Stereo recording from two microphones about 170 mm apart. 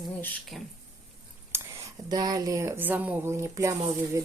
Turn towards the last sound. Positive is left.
turn(degrees=-15)  # may be behind; listen again after turning